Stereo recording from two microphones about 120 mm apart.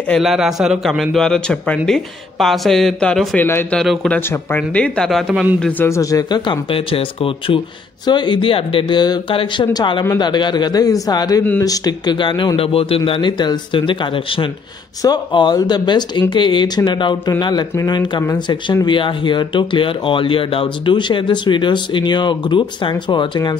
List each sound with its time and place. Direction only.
0.1 s a man's voice: centre (ahead or behind)
3.3 s a man's voice: 20° left (ahead or behind)
3.7 s a man's voice: centre (ahead or behind)
4.3 s speech: 15° left (ahead or behind)
5.3 s a man's voice: 10° right (ahead or behind)
5.6 s speech: 15° left (ahead or behind)
5.9 s speech: 25° left (ahead or behind)